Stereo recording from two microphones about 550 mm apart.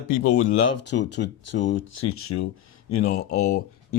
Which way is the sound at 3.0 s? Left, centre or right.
Centre.